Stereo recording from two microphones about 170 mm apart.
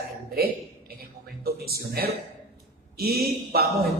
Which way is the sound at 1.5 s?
65° right (ahead or behind).